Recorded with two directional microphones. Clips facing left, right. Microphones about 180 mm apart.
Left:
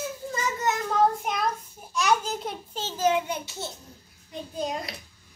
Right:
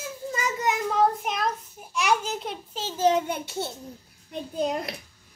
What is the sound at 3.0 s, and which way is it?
Speech, 35° right (ahead or behind).